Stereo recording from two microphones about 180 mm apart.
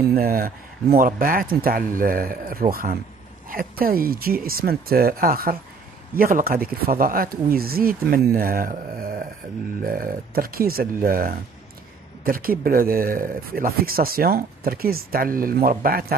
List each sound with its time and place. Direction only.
0.1 s speech: 55° right (ahead or behind)